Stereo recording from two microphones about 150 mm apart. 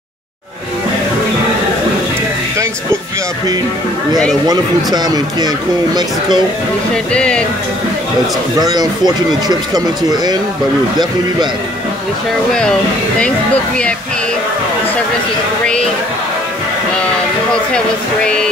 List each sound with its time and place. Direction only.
4.5 s speech: 25° right (ahead or behind)
7.1 s speech: 5° left (ahead or behind)
8.5 s speech: 25° right (ahead or behind)